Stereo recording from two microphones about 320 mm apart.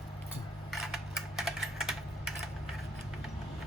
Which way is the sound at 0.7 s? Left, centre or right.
Centre.